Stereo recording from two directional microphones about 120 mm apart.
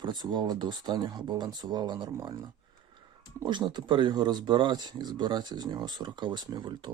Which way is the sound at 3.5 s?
40° right (ahead or behind).